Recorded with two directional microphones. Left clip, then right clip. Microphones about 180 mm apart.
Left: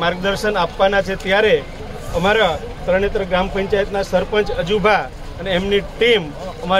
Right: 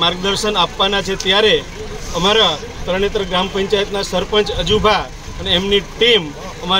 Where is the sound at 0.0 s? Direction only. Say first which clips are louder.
Right 2 dB; centre (ahead or behind).